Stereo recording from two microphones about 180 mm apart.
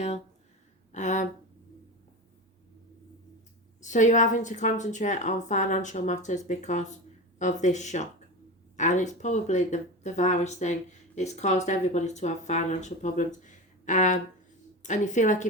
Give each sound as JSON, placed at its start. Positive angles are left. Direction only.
{"t": 0.9, "sound": "a woman's voice", "side_deg": 40}
{"t": 3.8, "sound": "a woman's voice", "side_deg": 45}